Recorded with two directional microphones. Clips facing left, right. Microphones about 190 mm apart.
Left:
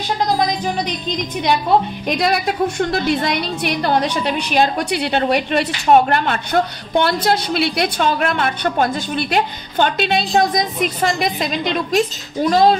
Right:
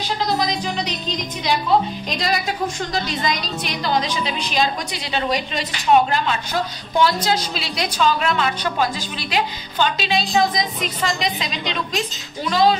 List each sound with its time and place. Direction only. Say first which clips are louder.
2.0 s a woman's voice: left 5 dB; 60° left (ahead or behind)